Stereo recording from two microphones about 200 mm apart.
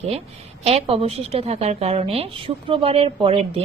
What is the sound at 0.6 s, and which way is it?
A woman's voice, 30° right (ahead or behind).